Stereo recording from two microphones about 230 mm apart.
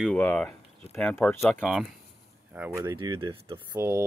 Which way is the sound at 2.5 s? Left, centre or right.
Centre.